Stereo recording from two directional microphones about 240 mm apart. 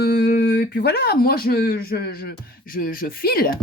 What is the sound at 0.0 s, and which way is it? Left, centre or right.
A woman's voice, left.